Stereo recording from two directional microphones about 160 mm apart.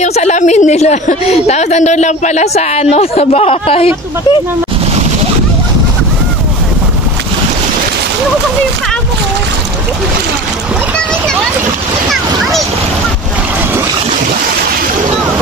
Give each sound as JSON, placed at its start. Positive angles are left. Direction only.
{"t": 0.0, "sound": "a woman's voice", "side_deg": 45}